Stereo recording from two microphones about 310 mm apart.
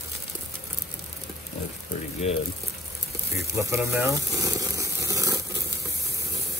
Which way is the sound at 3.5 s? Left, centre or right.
Centre.